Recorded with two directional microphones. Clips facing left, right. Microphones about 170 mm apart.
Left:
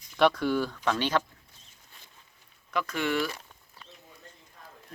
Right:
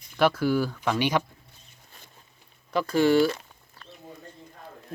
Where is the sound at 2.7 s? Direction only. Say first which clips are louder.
Right 8 dB; 35° right (ahead or behind).